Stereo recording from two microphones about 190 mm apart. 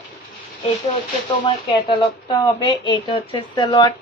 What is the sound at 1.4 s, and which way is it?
A woman's voice, 25° left (ahead or behind).